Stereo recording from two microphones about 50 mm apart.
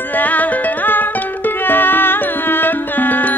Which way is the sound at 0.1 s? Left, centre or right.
Left.